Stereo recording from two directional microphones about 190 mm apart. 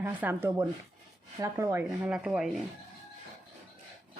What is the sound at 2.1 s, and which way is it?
Speech, 5° right (ahead or behind).